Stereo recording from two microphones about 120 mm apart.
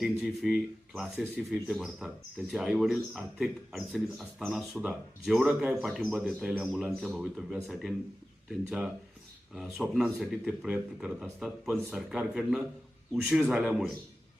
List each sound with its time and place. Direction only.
0.0 s a man's voice: 5° right (ahead or behind)